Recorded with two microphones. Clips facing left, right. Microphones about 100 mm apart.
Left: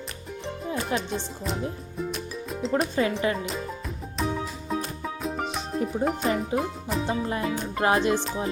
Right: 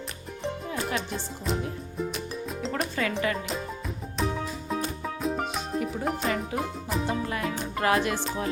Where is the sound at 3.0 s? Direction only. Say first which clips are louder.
Left 4 dB; 25° left (ahead or behind).